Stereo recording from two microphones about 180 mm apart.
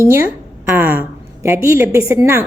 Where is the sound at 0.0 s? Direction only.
15° right (ahead or behind).